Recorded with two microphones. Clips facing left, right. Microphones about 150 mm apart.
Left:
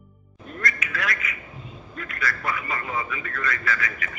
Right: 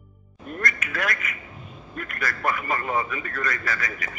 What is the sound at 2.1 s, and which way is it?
A man's voice, 50° right (ahead or behind).